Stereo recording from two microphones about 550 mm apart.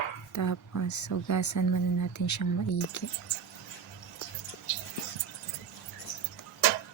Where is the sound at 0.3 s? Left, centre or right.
Left.